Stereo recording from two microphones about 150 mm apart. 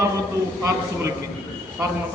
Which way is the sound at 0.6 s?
20° right (ahead or behind).